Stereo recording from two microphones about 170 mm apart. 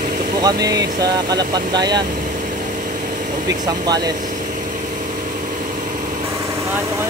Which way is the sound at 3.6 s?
25° right (ahead or behind).